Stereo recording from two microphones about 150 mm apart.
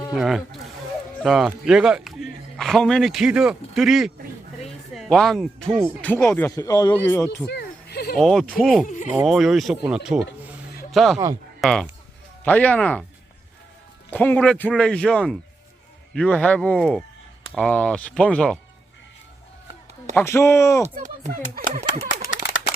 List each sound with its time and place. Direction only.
0.1 s a man's voice: centre (ahead or behind)
4.6 s a sound: 5° left (ahead or behind)
6.0 s speech: 15° left (ahead or behind)
7.5 s a sound: 90° left
8.1 s speech: centre (ahead or behind)
8.9 s speech: 55° left (ahead or behind)
9.2 s speech: centre (ahead or behind)
14.1 s speech: 10° left (ahead or behind)
20.1 s speech: 20° left (ahead or behind)
20.9 s speech: 65° right (ahead or behind)